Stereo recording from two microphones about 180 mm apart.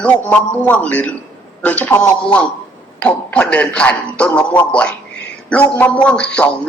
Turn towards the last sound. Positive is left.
turn(degrees=5)  # may be behind; listen again after turning